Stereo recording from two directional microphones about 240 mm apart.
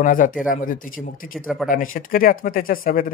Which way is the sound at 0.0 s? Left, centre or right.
Left.